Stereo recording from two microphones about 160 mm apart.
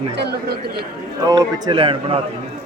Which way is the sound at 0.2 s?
90° right.